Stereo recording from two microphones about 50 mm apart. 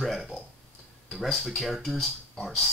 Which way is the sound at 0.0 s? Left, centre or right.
Centre.